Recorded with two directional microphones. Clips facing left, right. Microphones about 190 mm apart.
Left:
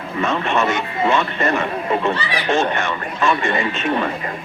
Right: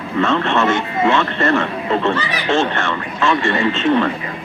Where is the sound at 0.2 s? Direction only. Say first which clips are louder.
Right 3 dB; 15° left (ahead or behind).